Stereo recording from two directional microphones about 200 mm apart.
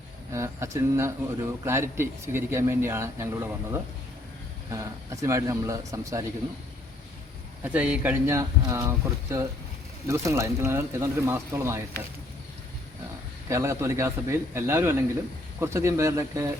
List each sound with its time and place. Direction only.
0.3 s speech: 15° right (ahead or behind)
7.6 s speech: 5° right (ahead or behind)
13.5 s speech: 15° right (ahead or behind)